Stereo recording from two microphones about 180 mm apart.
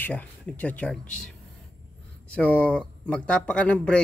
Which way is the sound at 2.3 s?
5° left (ahead or behind).